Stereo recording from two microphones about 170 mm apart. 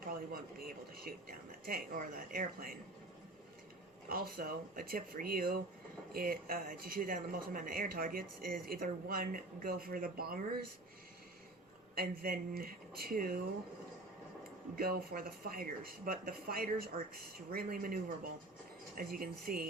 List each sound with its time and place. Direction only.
0.0 s speech: 55° right (ahead or behind)
4.1 s speech: 60° right (ahead or behind)
11.9 s speech: 60° right (ahead or behind)
14.8 s speech: 60° right (ahead or behind)